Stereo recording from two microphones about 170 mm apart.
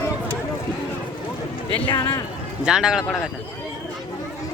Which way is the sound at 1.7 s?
30° left (ahead or behind).